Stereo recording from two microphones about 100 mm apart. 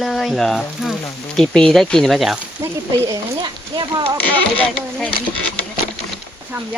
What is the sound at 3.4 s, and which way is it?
Speech, 45° right (ahead or behind).